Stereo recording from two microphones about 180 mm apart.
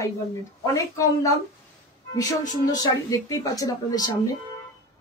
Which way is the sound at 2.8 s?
20° left (ahead or behind).